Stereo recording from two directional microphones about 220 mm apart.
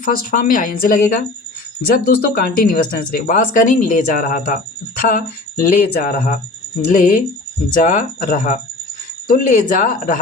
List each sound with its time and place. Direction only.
0.0 s speech: 40° left (ahead or behind)